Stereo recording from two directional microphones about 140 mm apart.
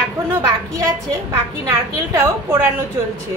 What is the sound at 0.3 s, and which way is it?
Speech, 20° right (ahead or behind).